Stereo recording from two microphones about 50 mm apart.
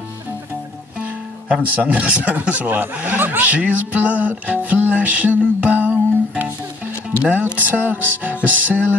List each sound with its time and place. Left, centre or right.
0.9 s speech: right